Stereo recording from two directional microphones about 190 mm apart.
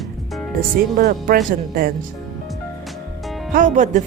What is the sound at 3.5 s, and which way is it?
Speech, 45° right (ahead or behind).